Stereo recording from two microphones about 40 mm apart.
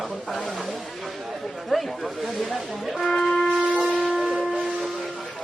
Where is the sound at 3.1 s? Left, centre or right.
Centre.